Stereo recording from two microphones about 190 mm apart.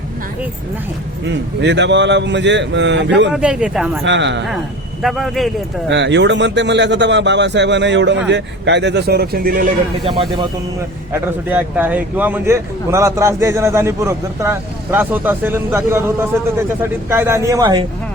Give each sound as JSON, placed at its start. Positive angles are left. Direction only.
{"t": 1.3, "sound": "speech", "side_deg": -70}
{"t": 3.3, "sound": "speech", "side_deg": -5}
{"t": 4.0, "sound": "speech", "side_deg": -70}
{"t": 5.0, "sound": "speech", "side_deg": 0}
{"t": 5.9, "sound": "speech", "side_deg": -70}
{"t": 11.1, "sound": "speech", "side_deg": -10}